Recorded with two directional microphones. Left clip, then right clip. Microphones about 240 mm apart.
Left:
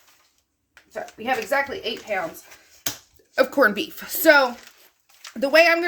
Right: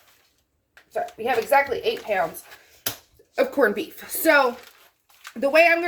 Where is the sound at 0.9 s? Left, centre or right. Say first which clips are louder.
Right 1 dB; left.